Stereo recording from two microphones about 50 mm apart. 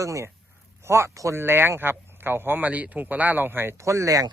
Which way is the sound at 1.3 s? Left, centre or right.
Right.